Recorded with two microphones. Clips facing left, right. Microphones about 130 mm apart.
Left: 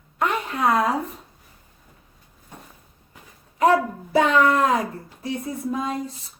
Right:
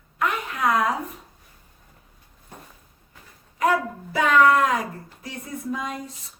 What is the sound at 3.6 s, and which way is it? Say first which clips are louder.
Speech: left 4 dB; 30° left (ahead or behind).